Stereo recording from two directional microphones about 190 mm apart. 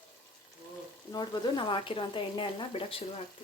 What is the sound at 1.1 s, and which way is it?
Speech, 20° left (ahead or behind).